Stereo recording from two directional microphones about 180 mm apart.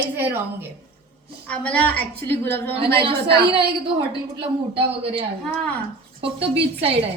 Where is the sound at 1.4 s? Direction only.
5° left (ahead or behind).